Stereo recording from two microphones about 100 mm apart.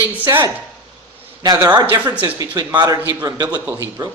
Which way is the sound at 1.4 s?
40° right (ahead or behind).